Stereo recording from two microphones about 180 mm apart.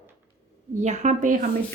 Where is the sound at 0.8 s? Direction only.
40° right (ahead or behind).